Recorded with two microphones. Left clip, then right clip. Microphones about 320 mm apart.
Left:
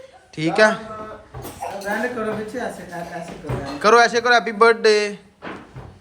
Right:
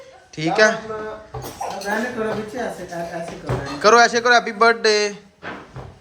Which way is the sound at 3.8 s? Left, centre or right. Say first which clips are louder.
Right 1 dB; centre.